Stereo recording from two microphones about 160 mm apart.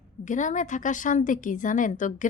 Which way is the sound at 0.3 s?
50° left (ahead or behind).